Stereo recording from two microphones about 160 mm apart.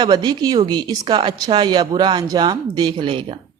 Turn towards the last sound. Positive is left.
turn(degrees=-35)  # may be behind; listen again after turning